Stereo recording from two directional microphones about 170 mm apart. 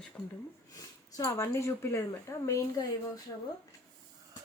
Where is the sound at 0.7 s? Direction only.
20° left (ahead or behind).